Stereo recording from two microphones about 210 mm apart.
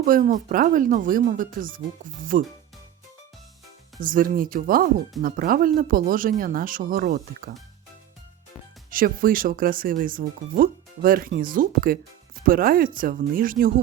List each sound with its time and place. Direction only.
0.0 s speech: 40° right (ahead or behind)
4.0 s speech: 40° right (ahead or behind)
8.9 s speech: 40° right (ahead or behind)